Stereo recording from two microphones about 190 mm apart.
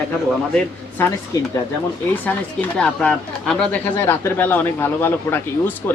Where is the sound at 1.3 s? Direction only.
20° left (ahead or behind).